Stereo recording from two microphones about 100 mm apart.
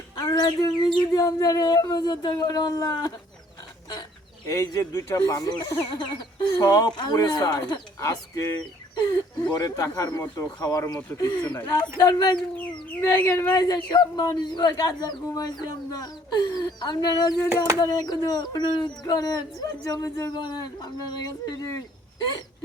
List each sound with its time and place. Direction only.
0.3 s speech: 45° left (ahead or behind)
4.5 s speech: 35° left (ahead or behind)
6.9 s speech: 45° left (ahead or behind)
8.0 s speech: 30° left (ahead or behind)
9.0 s speech: 40° left (ahead or behind)
13.1 s speech: 20° left (ahead or behind)
13.6 s speech: 45° left (ahead or behind)
20.3 s speech: 50° left (ahead or behind)